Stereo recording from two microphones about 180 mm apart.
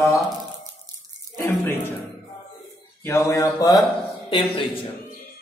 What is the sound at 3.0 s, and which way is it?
Mantra, 15° left (ahead or behind).